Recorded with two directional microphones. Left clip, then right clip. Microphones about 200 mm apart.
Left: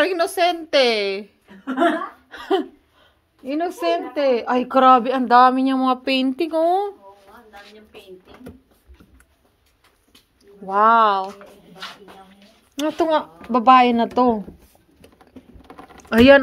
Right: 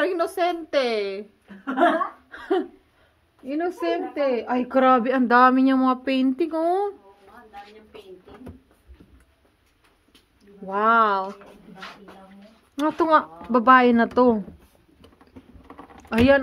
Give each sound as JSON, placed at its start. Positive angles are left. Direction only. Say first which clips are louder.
{"t": 0.0, "sound": "a woman's voice", "louder": "left 4 dB", "side_deg": 20}
{"t": 2.2, "sound": "a sound", "louder": "left 3 dB", "side_deg": 15}
{"t": 3.4, "sound": "a woman's voice", "louder": "left 4 dB", "side_deg": 10}
{"t": 4.6, "sound": "a woman's voice", "louder": "left 5 dB", "side_deg": -5}
{"t": 5.1, "sound": "a woman's voice", "louder": "left 3 dB", "side_deg": -25}
{"t": 10.4, "sound": "speech", "louder": "left 6 dB", "side_deg": -5}
{"t": 12.7, "sound": "speech", "louder": "left 2 dB", "side_deg": -5}
{"t": 13.1, "sound": "speech", "louder": "right 1 dB", "side_deg": -45}
{"t": 16.1, "sound": "speech", "louder": "left 7 dB", "side_deg": 25}